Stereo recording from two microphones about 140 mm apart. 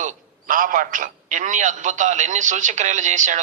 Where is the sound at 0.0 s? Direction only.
65° right (ahead or behind).